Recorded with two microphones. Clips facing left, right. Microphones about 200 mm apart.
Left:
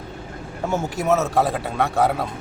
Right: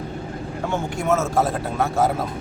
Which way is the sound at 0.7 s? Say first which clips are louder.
Left 2 dB; 5° left (ahead or behind).